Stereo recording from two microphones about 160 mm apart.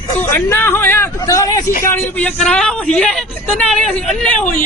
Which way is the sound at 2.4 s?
5° left (ahead or behind).